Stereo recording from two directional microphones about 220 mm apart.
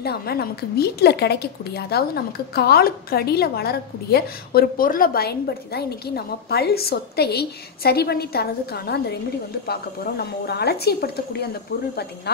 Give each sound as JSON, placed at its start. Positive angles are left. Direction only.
{"t": 0.0, "sound": "a woman's voice", "side_deg": 45}